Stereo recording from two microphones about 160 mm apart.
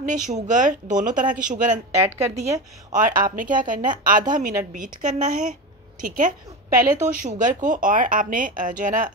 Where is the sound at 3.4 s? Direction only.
55° right (ahead or behind).